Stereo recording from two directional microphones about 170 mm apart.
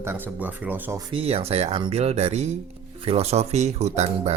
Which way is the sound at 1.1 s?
35° right (ahead or behind).